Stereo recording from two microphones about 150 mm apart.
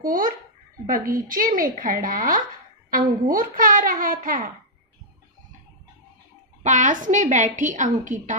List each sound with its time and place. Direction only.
0.8 s a woman's voice: 65° right (ahead or behind)
6.6 s a woman's voice: 55° right (ahead or behind)